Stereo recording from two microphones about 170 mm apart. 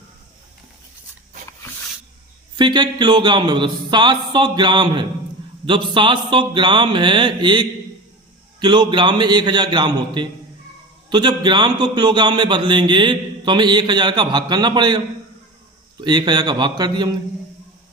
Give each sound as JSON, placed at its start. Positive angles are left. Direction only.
{"t": 2.6, "sound": "a man's voice", "side_deg": -25}